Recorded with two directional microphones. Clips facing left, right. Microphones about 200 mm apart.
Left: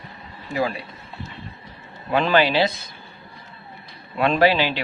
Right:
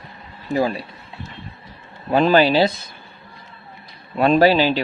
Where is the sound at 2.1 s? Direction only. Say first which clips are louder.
Right 4 dB; 35° right (ahead or behind).